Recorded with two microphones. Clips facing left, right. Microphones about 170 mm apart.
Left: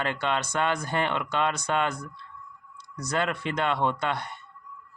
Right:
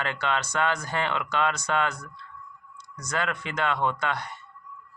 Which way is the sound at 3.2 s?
25° left (ahead or behind).